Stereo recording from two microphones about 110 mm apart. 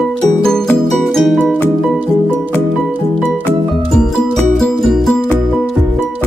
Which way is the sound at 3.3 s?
5° left (ahead or behind).